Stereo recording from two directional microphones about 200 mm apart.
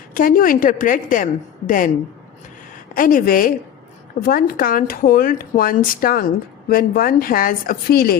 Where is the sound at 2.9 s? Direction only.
45° left (ahead or behind).